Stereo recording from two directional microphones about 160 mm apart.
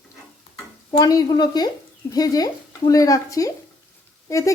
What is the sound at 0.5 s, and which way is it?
Speech, 25° left (ahead or behind).